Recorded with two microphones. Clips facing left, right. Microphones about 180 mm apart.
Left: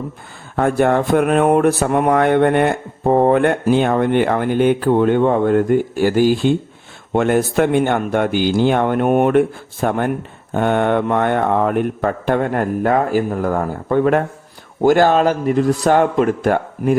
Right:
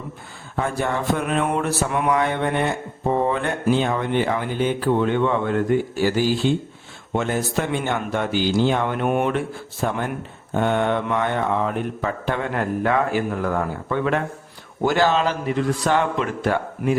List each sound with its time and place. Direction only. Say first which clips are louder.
0.5 s mantra: left 9 dB; 55° left (ahead or behind)
9.8 s mantra: left 6 dB; 55° left (ahead or behind)
10.5 s speech: left 4 dB; 55° left (ahead or behind)